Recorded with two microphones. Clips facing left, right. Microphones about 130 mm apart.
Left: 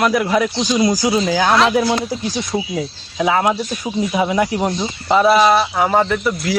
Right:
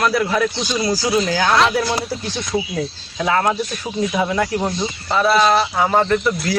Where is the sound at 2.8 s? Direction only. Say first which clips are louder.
Left 2 dB; 10° left (ahead or behind).